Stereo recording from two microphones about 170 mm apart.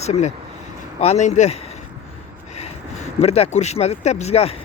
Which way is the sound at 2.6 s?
40° left (ahead or behind).